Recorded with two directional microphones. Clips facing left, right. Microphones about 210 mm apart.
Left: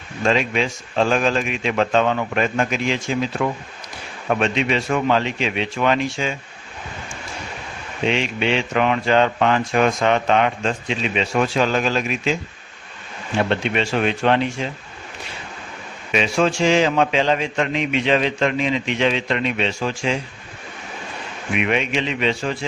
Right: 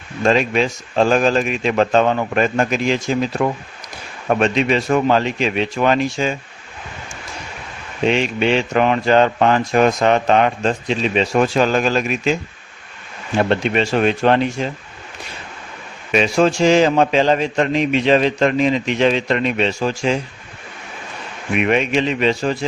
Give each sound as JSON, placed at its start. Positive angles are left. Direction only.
{"t": 0.3, "sound": "speech", "side_deg": -40}
{"t": 8.0, "sound": "speech", "side_deg": -45}
{"t": 13.5, "sound": "speech", "side_deg": -40}
{"t": 16.1, "sound": "speech", "side_deg": -40}
{"t": 21.5, "sound": "speech", "side_deg": -45}